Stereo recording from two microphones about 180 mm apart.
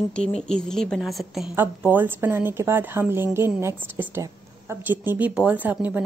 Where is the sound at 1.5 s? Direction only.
10° right (ahead or behind).